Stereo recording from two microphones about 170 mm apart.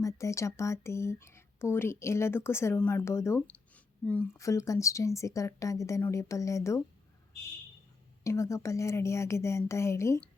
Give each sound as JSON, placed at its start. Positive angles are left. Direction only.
{"t": 0.0, "sound": "speech", "side_deg": 15}
{"t": 8.2, "sound": "speech", "side_deg": 15}